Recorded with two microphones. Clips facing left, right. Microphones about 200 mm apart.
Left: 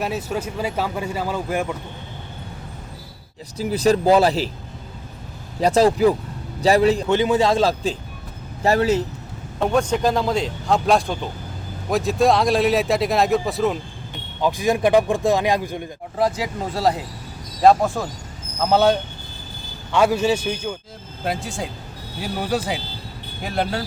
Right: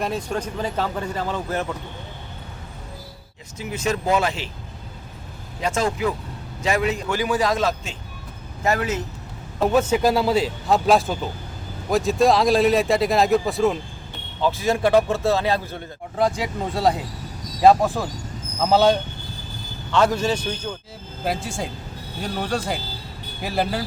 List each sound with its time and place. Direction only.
0.0 s speech: 5° left (ahead or behind)
3.6 s a man's voice: 35° left (ahead or behind)
5.5 s a man's voice: 35° left (ahead or behind)
9.6 s speech: 5° right (ahead or behind)
14.4 s speech: 15° left (ahead or behind)
16.1 s speech: centre (ahead or behind)
19.9 s speech: 10° left (ahead or behind)